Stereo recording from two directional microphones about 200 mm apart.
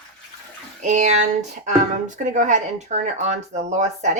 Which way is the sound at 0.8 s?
35° right (ahead or behind).